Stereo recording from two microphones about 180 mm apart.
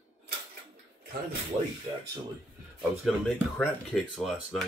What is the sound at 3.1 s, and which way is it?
Speech, centre (ahead or behind).